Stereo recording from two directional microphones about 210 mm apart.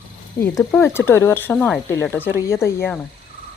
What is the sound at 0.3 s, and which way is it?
Speech, 10° left (ahead or behind).